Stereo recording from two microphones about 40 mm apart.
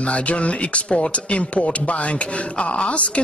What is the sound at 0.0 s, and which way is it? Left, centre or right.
A man's voice, left.